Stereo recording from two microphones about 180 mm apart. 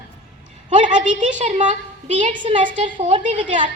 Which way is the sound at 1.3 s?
45° right (ahead or behind).